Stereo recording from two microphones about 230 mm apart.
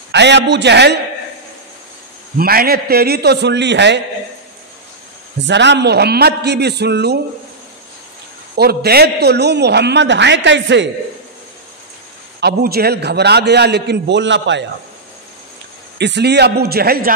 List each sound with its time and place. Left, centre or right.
0.1 s a man's voice: right
2.3 s a man's voice: right
5.4 s a man's voice: right
8.5 s a man's voice: right
12.4 s a man's voice: right
16.0 s a man's voice: right